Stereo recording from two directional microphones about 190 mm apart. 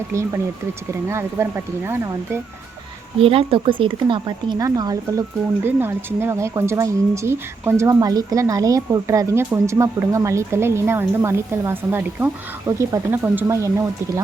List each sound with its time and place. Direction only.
1.1 s speech: 10° right (ahead or behind)
3.2 s speech: 30° right (ahead or behind); by 13.8 s 15° right (ahead or behind)